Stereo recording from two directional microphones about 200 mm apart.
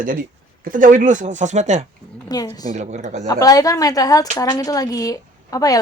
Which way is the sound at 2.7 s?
35° right (ahead or behind).